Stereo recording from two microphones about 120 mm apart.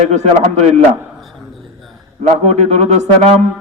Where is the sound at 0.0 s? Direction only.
70° right (ahead or behind).